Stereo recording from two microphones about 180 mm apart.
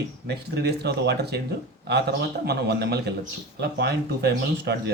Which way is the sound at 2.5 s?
65° right (ahead or behind).